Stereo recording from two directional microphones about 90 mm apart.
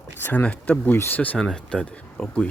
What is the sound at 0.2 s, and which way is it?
Speech, 20° left (ahead or behind).